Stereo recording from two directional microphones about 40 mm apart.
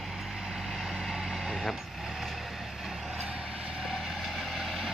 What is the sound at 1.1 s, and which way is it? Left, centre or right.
Vehicle, centre.